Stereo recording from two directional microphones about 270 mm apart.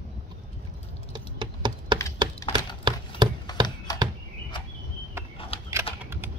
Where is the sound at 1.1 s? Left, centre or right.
Centre.